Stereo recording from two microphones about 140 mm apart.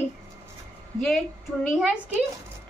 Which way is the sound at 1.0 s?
Centre (ahead or behind).